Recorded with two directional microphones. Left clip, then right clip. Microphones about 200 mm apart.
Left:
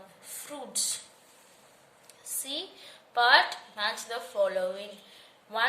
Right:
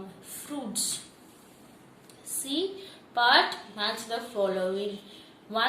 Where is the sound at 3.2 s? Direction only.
45° left (ahead or behind).